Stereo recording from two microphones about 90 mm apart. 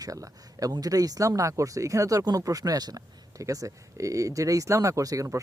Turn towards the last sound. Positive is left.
turn(degrees=-35)  # may be behind; listen again after turning